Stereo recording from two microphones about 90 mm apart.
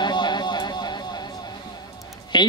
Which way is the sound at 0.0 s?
55° left (ahead or behind).